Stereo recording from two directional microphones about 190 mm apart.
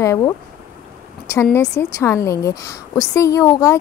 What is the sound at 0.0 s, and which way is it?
Speech, 15° left (ahead or behind).